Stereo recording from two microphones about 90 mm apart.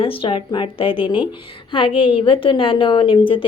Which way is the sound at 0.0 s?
85° left.